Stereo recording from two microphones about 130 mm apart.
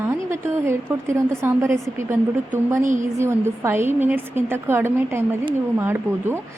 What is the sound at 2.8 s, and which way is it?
Speech, 75° right (ahead or behind).